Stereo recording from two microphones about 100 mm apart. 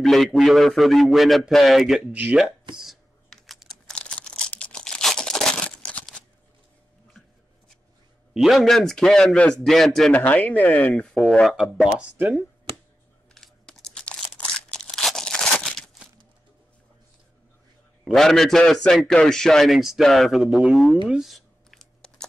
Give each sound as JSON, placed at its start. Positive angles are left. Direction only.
{"t": 0.0, "sound": "a man's voice", "side_deg": 5}
{"t": 2.7, "sound": "computer keyboard", "side_deg": -5}
{"t": 3.9, "sound": "a sound", "side_deg": 10}
{"t": 8.4, "sound": "a man's voice", "side_deg": 0}
{"t": 10.1, "sound": "speech", "side_deg": 15}
{"t": 11.2, "sound": "a man's voice", "side_deg": 0}
{"t": 13.3, "sound": "a sound", "side_deg": 5}
{"t": 18.0, "sound": "a man's voice", "side_deg": 5}
{"t": 21.1, "sound": "a sound", "side_deg": 0}